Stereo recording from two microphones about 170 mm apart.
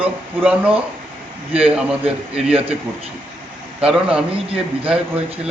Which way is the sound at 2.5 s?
35° right (ahead or behind).